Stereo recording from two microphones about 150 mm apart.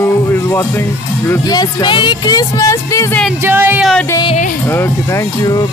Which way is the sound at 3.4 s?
15° right (ahead or behind).